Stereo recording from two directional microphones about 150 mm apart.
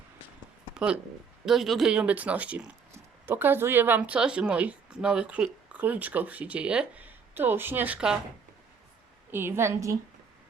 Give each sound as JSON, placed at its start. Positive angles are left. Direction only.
{"t": 1.5, "sound": "a woman's voice", "side_deg": 0}
{"t": 9.3, "sound": "a woman's voice", "side_deg": -15}